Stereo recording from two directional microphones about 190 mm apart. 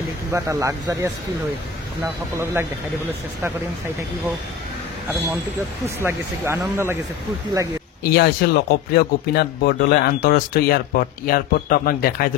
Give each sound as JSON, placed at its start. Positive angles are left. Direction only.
{"t": 0.3, "sound": "speech", "side_deg": -15}
{"t": 5.9, "sound": "speech", "side_deg": -15}
{"t": 8.0, "sound": "speech", "side_deg": 55}